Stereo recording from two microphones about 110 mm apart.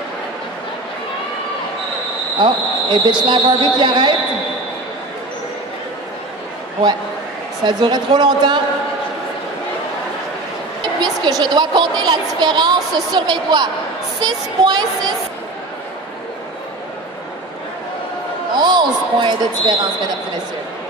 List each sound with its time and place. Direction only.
2.4 s a woman's voice: 45° right (ahead or behind)
7.6 s a woman's voice: 40° right (ahead or behind)
11.0 s a woman's voice: 40° right (ahead or behind)
18.5 s a woman's voice: 40° right (ahead or behind)